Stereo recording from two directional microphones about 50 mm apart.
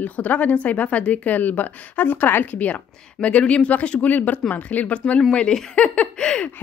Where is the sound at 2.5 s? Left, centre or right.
Left.